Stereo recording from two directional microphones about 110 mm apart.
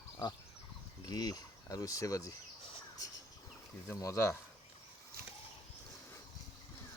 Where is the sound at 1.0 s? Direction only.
35° left (ahead or behind).